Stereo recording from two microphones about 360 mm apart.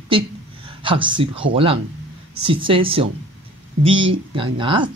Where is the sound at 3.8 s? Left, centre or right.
Right.